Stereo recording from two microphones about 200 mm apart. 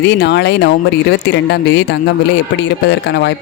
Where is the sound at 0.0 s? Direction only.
60° left (ahead or behind).